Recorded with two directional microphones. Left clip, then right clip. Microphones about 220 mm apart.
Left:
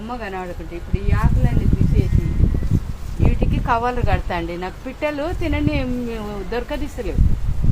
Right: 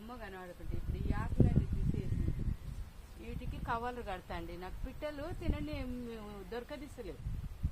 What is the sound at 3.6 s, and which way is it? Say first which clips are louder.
A woman's voice: left 18 dB; 25° right (ahead or behind).